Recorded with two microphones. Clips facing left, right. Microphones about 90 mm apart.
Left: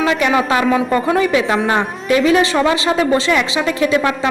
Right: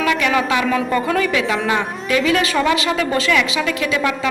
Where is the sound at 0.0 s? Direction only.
30° left (ahead or behind).